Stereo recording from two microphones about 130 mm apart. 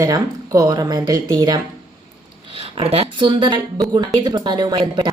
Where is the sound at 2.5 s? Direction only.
45° right (ahead or behind).